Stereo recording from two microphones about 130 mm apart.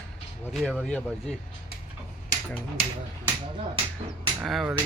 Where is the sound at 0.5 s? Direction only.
Centre (ahead or behind).